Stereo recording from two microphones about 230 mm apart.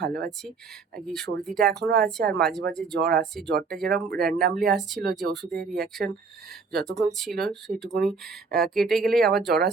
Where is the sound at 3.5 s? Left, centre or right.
Right.